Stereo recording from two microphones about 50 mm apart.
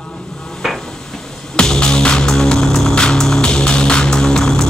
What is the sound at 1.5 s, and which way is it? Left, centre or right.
Music, centre.